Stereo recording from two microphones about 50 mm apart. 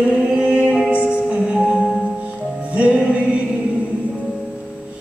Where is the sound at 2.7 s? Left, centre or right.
Right.